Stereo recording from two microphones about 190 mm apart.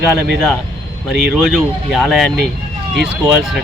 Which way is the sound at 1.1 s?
Centre (ahead or behind).